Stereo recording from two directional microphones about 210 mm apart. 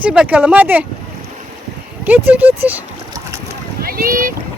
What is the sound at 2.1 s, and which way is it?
Speech, 10° right (ahead or behind).